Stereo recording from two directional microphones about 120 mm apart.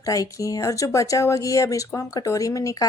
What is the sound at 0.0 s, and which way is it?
Speech, 30° left (ahead or behind).